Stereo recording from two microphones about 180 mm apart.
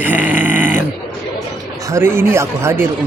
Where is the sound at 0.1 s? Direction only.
10° right (ahead or behind).